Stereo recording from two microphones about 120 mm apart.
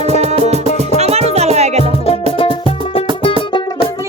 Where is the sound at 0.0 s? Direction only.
65° right (ahead or behind).